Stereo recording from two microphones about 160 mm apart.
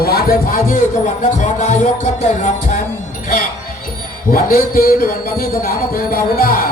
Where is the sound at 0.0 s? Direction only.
75° left (ahead or behind).